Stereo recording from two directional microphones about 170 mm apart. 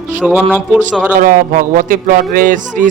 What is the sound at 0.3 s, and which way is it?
Speech, 10° right (ahead or behind).